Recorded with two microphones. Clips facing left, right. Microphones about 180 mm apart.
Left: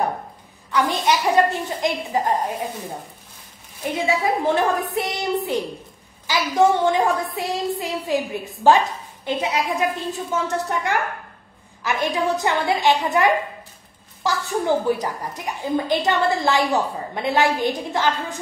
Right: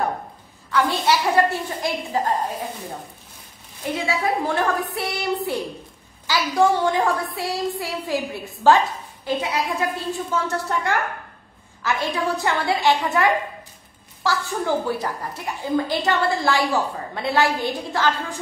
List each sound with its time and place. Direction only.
0.7 s a woman's voice: 15° left (ahead or behind)
3.8 s a woman's voice: 20° left (ahead or behind)